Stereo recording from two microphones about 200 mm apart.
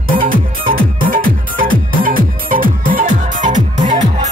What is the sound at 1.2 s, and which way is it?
Music, 45° right (ahead or behind).